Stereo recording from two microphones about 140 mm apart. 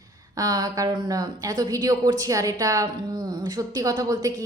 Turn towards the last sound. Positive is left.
turn(degrees=-25)  # may be behind; listen again after turning